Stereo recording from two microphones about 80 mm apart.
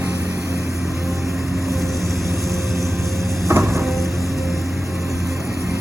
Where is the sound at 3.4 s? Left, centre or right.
Right.